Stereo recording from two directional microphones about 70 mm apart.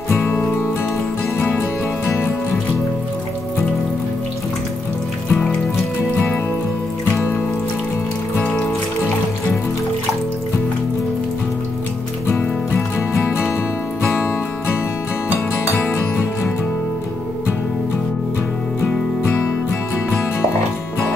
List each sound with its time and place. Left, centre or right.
0.1 s music: left
5.3 s music: centre
8.5 s music: centre
12.3 s music: left
18.9 s music: centre